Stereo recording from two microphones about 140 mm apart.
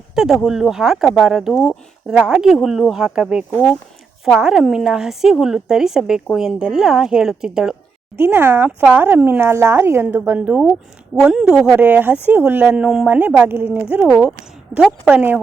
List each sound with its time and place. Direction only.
0.2 s a woman's voice: centre (ahead or behind)
8.1 s speech: 15° right (ahead or behind)